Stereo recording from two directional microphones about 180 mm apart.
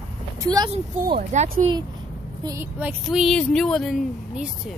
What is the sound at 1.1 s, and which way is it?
Speech, 50° right (ahead or behind).